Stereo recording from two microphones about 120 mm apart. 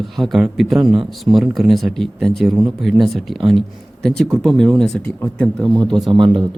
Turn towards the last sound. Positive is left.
turn(degrees=-40)  # may be behind; listen again after turning